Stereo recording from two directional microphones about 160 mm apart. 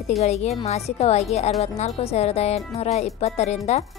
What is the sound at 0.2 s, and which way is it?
Speech, 45° left (ahead or behind).